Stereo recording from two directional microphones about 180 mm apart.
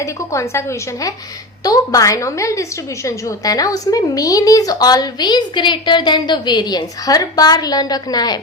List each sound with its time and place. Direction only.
0.0 s a woman's voice: 15° left (ahead or behind)